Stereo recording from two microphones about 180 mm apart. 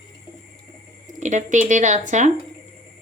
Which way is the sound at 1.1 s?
40° right (ahead or behind).